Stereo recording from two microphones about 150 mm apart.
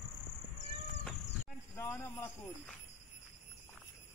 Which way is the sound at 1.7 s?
20° left (ahead or behind).